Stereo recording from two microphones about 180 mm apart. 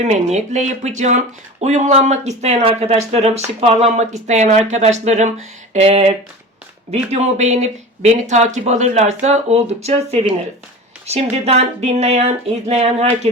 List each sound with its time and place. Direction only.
0.0 s speech: 40° right (ahead or behind)
7.1 s speech: 40° right (ahead or behind)